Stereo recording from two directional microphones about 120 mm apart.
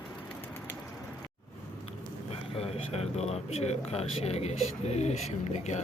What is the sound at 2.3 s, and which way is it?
Speech, 55° left (ahead or behind).